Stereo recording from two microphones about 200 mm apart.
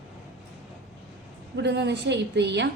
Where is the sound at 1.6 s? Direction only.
60° right (ahead or behind).